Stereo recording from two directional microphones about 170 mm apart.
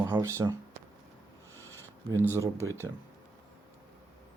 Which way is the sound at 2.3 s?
20° right (ahead or behind).